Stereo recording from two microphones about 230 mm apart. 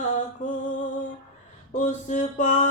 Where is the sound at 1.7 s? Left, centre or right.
Left.